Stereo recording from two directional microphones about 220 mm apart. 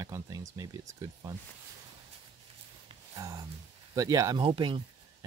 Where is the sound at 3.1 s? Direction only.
15° right (ahead or behind).